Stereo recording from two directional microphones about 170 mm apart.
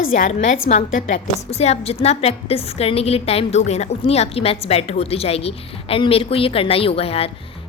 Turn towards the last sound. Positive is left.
turn(degrees=35)  # may be behind; listen again after turning